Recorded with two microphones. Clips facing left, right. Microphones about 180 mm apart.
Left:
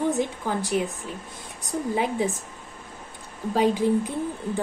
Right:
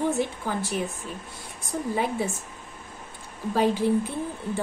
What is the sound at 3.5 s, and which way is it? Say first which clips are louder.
Speech: left 1 dB; 15° left (ahead or behind).